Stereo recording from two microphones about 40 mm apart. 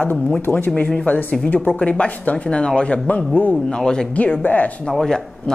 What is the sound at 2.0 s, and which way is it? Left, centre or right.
Speech, left.